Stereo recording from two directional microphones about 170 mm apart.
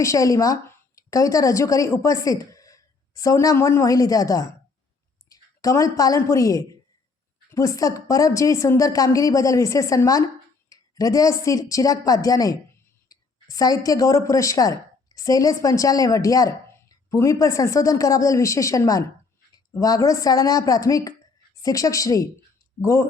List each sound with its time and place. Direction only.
0.0 s a woman's voice: 20° left (ahead or behind)